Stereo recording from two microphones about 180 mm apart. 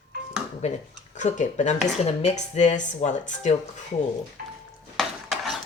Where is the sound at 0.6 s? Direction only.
40° left (ahead or behind).